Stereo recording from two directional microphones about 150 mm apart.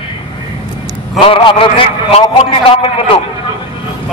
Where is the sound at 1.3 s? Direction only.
35° left (ahead or behind).